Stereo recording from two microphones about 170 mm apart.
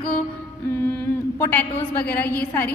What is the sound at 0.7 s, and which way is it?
A woman's voice, 10° left (ahead or behind).